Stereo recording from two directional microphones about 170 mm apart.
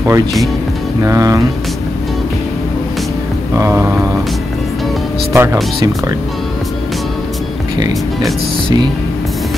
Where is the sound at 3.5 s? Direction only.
15° right (ahead or behind).